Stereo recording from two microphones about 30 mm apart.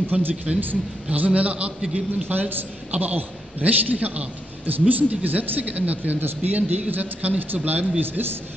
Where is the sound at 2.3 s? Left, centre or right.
Right.